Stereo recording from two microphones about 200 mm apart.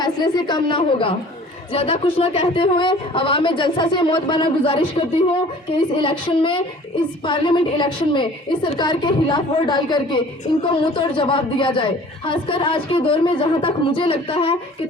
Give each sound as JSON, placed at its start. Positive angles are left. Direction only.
{"t": 0.0, "sound": "speech", "side_deg": 20}